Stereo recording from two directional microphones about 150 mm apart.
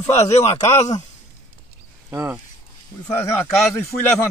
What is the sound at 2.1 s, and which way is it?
Speech, 20° right (ahead or behind).